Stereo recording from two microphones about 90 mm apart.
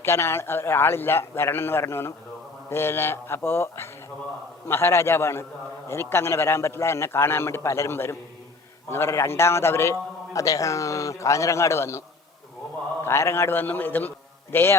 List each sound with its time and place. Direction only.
0.0 s a man's voice: 30° left (ahead or behind)
13.1 s a man's voice: 30° left (ahead or behind)